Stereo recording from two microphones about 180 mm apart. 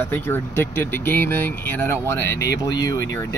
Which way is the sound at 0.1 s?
10° left (ahead or behind).